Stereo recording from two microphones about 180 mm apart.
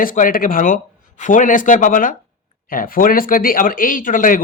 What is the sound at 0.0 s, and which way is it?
Speech, 50° left (ahead or behind).